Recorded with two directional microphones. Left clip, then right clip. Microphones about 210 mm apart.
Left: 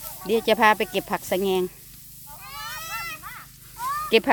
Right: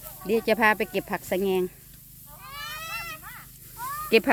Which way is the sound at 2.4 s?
25° right (ahead or behind).